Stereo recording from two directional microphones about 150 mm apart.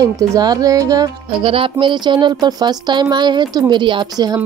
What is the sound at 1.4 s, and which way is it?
Speech, 35° right (ahead or behind).